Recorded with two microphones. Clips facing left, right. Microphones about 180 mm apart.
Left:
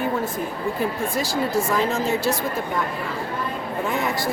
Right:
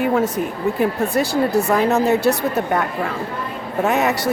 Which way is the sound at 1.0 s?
65° right (ahead or behind).